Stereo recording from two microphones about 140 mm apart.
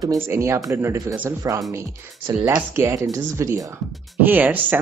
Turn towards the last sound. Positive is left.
turn(degrees=-15)  # may be behind; listen again after turning